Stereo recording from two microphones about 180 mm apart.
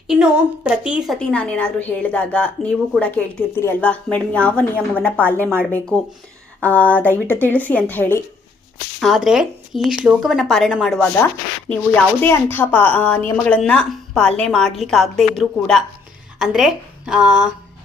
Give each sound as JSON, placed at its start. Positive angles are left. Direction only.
{"t": 0.1, "sound": "a woman's voice", "side_deg": -5}
{"t": 9.0, "sound": "speech", "side_deg": 0}
{"t": 12.2, "sound": "a woman's voice", "side_deg": 10}